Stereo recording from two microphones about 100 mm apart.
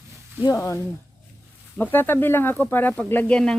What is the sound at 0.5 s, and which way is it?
Speech, 30° left (ahead or behind).